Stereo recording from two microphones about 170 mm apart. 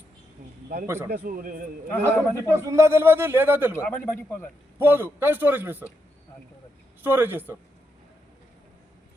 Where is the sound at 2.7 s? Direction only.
15° right (ahead or behind).